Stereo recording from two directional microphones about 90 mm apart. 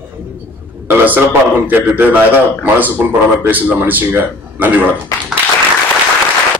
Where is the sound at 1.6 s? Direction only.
20° right (ahead or behind).